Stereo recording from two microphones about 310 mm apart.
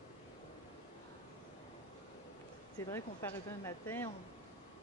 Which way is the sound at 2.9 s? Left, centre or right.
Centre.